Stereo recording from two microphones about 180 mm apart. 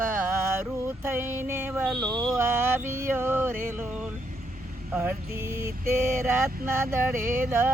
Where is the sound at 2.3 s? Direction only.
15° right (ahead or behind).